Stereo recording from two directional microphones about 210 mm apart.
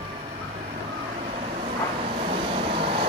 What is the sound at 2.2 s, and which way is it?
Vehicle, 25° right (ahead or behind).